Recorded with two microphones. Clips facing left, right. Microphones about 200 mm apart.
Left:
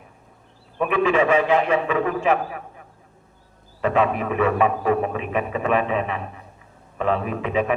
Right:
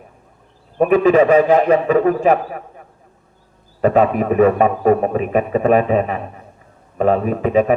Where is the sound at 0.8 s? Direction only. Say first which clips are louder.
Right 8 dB; 40° right (ahead or behind).